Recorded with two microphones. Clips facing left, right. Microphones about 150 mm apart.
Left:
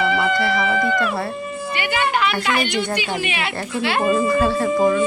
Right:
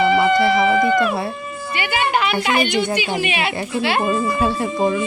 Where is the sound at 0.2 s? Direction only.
20° right (ahead or behind).